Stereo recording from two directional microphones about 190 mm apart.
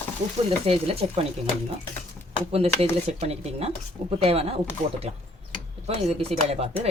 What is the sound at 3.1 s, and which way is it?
Speech, 35° right (ahead or behind).